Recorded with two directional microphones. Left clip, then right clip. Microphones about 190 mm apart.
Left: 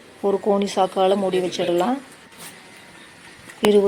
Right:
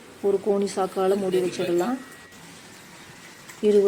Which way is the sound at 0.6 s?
20° left (ahead or behind).